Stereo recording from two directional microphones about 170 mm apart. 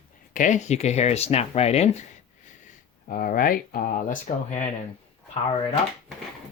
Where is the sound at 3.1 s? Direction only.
55° left (ahead or behind).